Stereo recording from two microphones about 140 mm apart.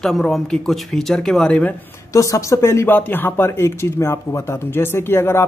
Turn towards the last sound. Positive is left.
turn(degrees=15)  # may be behind; listen again after turning